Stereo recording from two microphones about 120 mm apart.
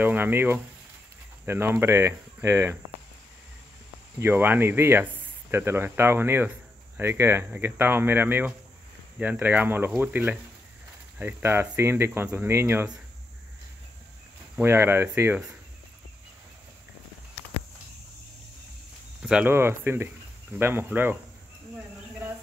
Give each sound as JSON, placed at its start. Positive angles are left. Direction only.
{"t": 0.0, "sound": "speech", "side_deg": -15}
{"t": 4.2, "sound": "speech", "side_deg": -20}
{"t": 14.6, "sound": "speech", "side_deg": -20}
{"t": 19.2, "sound": "speech", "side_deg": -10}
{"t": 19.5, "sound": "speech", "side_deg": -20}